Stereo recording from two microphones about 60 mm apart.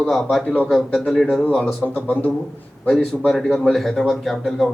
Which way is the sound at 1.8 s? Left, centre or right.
Left.